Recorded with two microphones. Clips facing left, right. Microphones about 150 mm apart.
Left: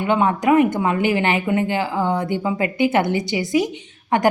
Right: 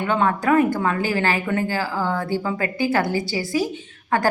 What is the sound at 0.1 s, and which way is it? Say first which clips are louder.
A woman's voice: left 3 dB; 20° left (ahead or behind).